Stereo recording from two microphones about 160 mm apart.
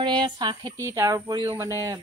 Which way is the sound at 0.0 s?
30° right (ahead or behind).